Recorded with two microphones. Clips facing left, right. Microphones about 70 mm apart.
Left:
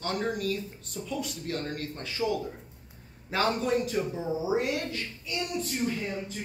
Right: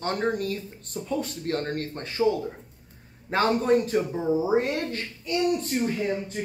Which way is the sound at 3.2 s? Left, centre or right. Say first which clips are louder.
Right 5 dB; right.